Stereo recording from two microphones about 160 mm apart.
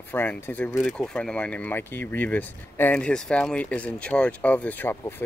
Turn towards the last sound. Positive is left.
turn(degrees=15)  # may be behind; listen again after turning